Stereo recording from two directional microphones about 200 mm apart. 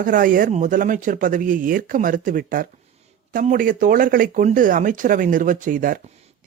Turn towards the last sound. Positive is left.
turn(degrees=-40)  # may be behind; listen again after turning